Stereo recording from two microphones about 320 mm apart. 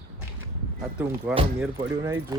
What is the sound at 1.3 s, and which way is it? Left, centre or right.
Speech, centre.